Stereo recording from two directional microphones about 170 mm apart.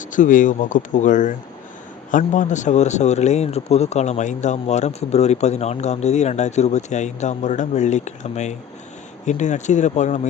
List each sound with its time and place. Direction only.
0.0 s speech: 50° left (ahead or behind)